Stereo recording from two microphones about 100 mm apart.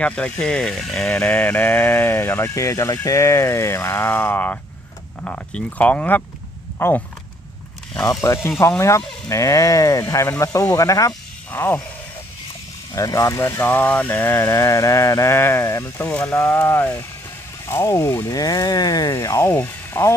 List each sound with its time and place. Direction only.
0.0 s speech: 10° left (ahead or behind)
8.1 s speech: 30° left (ahead or behind)
11.5 s speech: 20° left (ahead or behind)
12.9 s speech: 30° left (ahead or behind)
14.5 s speech: 35° left (ahead or behind)
15.8 s speech: 15° left (ahead or behind)
18.3 s speech: 40° left (ahead or behind)
19.1 s speech: 30° left (ahead or behind)